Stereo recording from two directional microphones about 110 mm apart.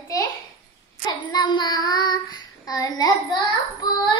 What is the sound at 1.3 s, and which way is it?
Child singing, 45° left (ahead or behind).